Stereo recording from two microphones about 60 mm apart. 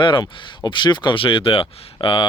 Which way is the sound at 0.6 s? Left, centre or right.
Left.